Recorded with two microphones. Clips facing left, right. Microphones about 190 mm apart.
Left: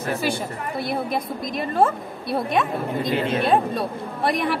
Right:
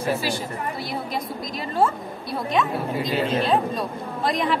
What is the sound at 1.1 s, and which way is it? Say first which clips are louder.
A woman's voice: left 3 dB; 55° left (ahead or behind).